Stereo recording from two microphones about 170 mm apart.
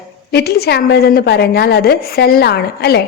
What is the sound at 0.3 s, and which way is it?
A woman's voice, 70° left (ahead or behind).